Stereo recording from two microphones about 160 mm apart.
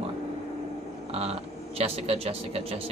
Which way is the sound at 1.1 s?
40° right (ahead or behind).